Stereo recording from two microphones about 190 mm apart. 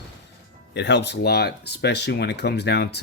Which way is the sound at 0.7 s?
65° left (ahead or behind).